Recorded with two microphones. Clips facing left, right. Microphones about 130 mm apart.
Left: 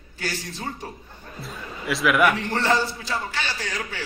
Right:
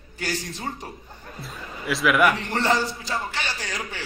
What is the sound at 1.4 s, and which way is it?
Speech, centre (ahead or behind).